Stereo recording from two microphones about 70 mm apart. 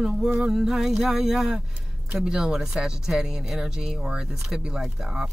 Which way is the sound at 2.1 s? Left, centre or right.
Centre.